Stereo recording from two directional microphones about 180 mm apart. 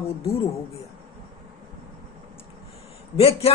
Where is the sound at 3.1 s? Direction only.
35° left (ahead or behind).